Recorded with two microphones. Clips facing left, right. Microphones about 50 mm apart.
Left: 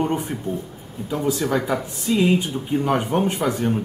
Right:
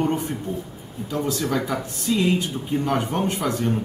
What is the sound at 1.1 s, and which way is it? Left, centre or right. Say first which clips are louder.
Speech: left 2 dB; centre.